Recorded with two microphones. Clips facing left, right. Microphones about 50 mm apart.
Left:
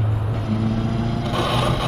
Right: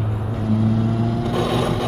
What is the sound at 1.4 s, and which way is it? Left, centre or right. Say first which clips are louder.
Mechanisms: even; left.